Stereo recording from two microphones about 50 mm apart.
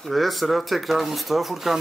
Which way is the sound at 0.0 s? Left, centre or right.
Centre.